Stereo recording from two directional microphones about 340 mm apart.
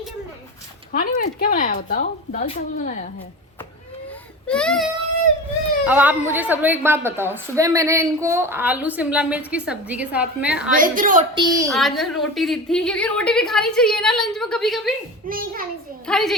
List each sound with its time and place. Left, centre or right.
0.9 s a woman's voice: left
4.4 s a woman's voice: centre
10.8 s a woman's voice: right
11.7 s a woman's voice: centre
15.3 s a woman's voice: right
16.0 s a woman's voice: centre